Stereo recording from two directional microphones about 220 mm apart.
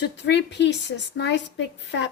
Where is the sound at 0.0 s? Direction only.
50° left (ahead or behind).